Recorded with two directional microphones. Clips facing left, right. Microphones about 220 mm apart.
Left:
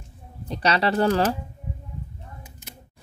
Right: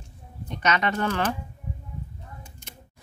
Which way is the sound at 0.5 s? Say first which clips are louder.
Left 3 dB; 35° left (ahead or behind).